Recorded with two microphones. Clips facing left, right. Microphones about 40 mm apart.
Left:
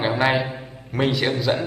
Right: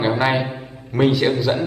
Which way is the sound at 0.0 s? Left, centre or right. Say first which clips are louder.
Right 2 dB; centre.